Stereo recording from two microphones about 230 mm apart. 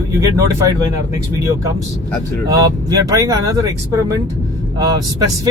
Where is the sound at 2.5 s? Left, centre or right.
Centre.